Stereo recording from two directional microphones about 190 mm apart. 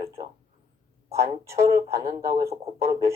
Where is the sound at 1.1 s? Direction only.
15° right (ahead or behind).